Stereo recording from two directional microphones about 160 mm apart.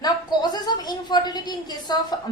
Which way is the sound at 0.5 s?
25° left (ahead or behind).